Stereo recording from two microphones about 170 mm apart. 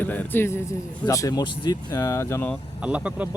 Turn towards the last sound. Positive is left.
turn(degrees=-5)  # may be behind; listen again after turning